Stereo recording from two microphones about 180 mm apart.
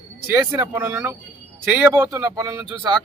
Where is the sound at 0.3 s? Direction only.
15° right (ahead or behind).